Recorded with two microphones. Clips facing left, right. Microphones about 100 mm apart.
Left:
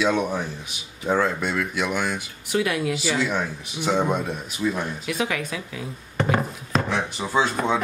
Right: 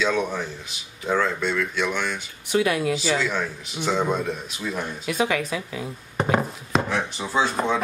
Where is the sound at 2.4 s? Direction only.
Centre (ahead or behind).